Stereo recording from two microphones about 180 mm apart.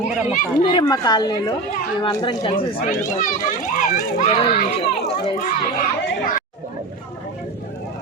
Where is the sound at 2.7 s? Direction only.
50° left (ahead or behind).